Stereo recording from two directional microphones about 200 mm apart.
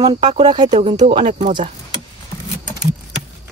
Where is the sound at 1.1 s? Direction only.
35° right (ahead or behind).